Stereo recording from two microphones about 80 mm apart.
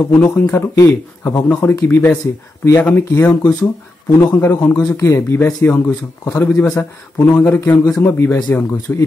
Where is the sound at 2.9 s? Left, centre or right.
Left.